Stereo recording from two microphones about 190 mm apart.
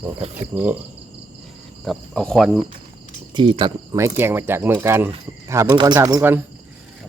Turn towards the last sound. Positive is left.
turn(degrees=-10)  # may be behind; listen again after turning